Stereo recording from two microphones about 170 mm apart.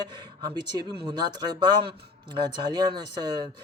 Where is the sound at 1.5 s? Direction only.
25° right (ahead or behind).